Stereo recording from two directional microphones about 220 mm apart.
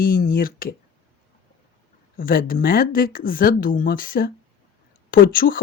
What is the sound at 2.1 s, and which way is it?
A woman's voice, 40° left (ahead or behind).